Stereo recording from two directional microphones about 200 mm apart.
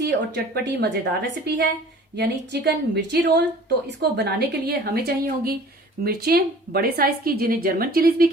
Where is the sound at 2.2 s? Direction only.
55° right (ahead or behind).